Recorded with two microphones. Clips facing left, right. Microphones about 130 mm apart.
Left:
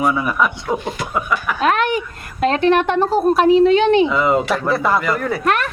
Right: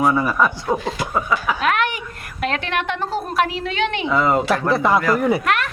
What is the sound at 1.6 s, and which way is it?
Speech, 35° left (ahead or behind).